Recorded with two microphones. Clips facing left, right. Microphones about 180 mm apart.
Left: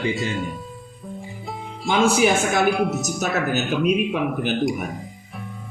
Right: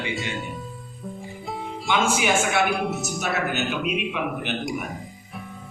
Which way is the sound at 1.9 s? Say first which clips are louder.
Left 5 dB; 35° left (ahead or behind).